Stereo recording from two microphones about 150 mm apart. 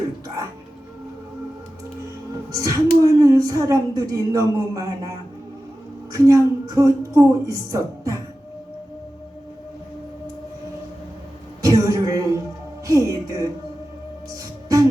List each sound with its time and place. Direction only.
2.5 s speech: 25° right (ahead or behind)
6.1 s speech: 25° right (ahead or behind)
11.6 s a sound: 25° right (ahead or behind)
12.9 s music: 20° right (ahead or behind)